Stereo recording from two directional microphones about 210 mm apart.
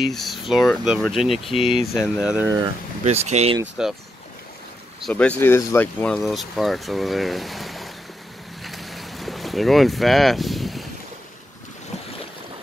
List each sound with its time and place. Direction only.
0.0 s speech: centre (ahead or behind)
2.4 s speech: 15° right (ahead or behind)
3.0 s speech: 30° right (ahead or behind)
3.8 s speech: 5° right (ahead or behind)
5.0 s speech: 5° left (ahead or behind)
8.6 s boat: centre (ahead or behind)